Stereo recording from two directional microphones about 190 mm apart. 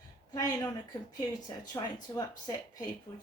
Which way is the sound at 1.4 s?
20° left (ahead or behind).